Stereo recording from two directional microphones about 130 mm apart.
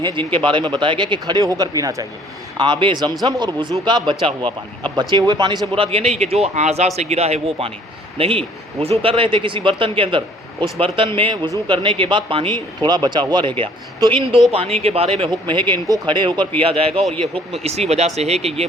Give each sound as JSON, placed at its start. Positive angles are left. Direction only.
{"t": 0.0, "sound": "speech", "side_deg": -40}
{"t": 2.6, "sound": "speech", "side_deg": -40}
{"t": 15.2, "sound": "speech", "side_deg": -40}